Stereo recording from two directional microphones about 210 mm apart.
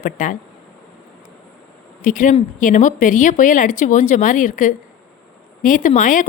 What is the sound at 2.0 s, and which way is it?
A woman's voice, 40° left (ahead or behind).